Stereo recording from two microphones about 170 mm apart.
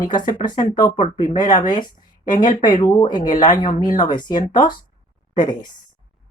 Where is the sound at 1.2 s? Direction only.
50° left (ahead or behind).